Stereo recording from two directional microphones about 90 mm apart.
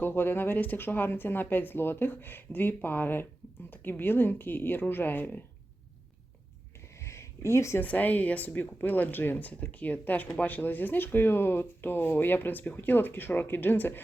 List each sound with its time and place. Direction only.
0.0 s speech: 25° left (ahead or behind)
7.0 s a sound: 30° left (ahead or behind)
7.8 s speech: 20° left (ahead or behind)